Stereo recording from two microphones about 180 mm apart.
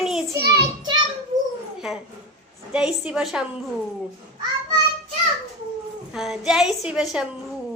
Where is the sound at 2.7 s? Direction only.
5° right (ahead or behind).